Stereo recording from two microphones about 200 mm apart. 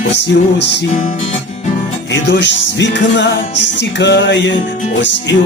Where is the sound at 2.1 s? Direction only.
60° left (ahead or behind).